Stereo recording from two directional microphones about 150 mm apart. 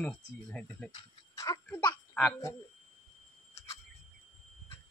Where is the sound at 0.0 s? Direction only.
10° left (ahead or behind).